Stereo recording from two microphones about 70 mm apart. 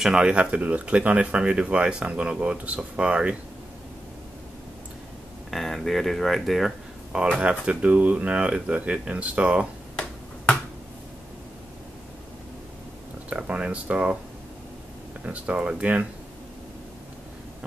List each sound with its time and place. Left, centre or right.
0.0 s speech: centre
5.5 s speech: centre
7.3 s speech: centre
9.9 s finger snapping: centre
13.3 s speech: centre
15.2 s speech: centre